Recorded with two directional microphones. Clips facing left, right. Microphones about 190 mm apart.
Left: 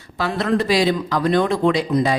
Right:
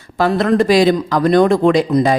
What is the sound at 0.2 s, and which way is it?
A man's voice, 50° right (ahead or behind).